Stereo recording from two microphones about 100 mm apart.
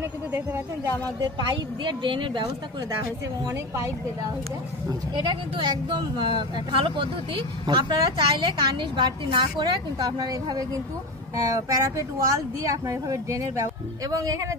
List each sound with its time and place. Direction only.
1.2 s speech: 50° right (ahead or behind)
3.0 s speech: 30° right (ahead or behind)
5.1 s speech: 50° right (ahead or behind)